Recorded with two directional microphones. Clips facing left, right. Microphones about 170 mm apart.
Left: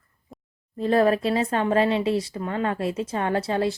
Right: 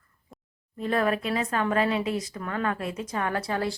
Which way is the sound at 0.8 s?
35° left (ahead or behind).